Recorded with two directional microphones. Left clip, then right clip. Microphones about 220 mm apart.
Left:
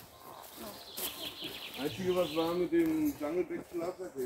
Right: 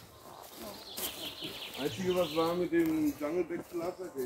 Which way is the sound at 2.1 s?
20° right (ahead or behind).